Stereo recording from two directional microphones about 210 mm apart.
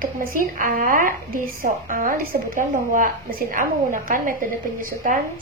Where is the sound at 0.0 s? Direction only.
40° right (ahead or behind).